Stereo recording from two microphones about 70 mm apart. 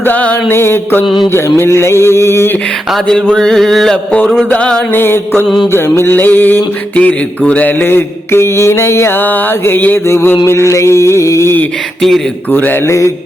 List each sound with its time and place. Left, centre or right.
0.0 s mantra: left
0.5 s mantra: left
3.3 s a sound: centre
4.4 s a sound: centre
4.9 s mantra: left
12.5 s mantra: left